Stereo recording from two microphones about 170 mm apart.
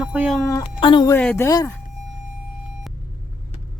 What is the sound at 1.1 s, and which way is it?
Speech, 10° left (ahead or behind).